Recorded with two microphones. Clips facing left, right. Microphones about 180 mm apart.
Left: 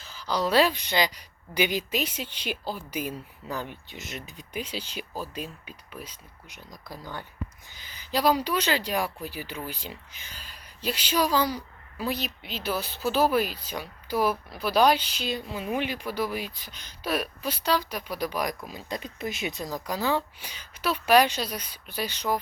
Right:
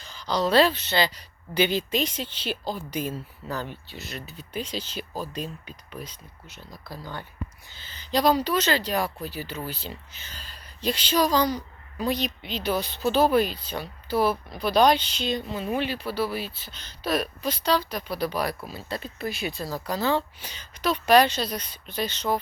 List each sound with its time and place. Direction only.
0.0 s speech: 5° left (ahead or behind)